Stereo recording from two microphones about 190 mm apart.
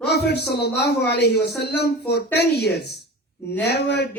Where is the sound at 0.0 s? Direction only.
60° left (ahead or behind).